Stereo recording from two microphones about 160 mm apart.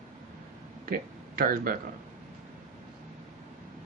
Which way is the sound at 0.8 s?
60° right (ahead or behind).